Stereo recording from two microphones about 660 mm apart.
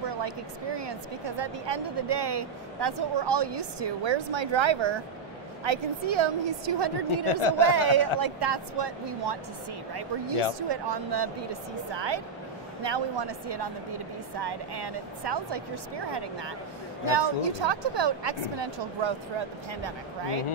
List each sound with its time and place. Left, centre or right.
0.0 s a sound: right
0.7 s speech: right
10.7 s speech: right